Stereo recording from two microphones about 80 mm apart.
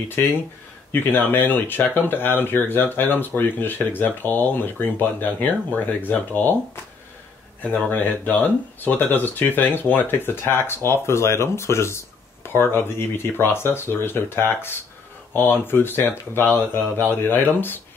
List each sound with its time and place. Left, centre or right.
0.9 s speech: left